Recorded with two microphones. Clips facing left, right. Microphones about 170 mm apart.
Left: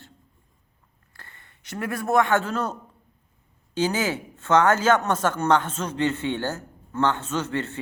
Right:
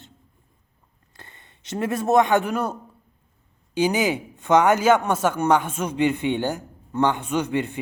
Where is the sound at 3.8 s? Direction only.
15° right (ahead or behind).